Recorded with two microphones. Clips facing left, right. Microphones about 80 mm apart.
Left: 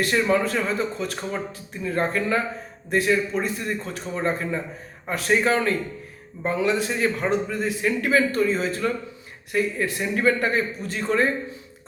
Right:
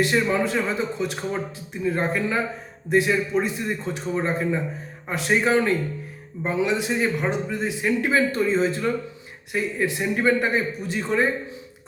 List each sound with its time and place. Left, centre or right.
0.0 s a man's voice: centre